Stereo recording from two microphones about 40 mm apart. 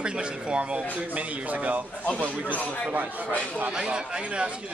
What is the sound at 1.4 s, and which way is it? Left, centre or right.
Speech, right.